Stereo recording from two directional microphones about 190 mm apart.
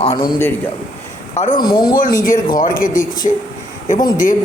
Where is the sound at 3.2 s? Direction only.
35° left (ahead or behind).